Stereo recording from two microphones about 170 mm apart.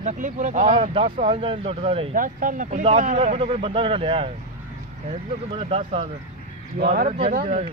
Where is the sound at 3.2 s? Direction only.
35° right (ahead or behind).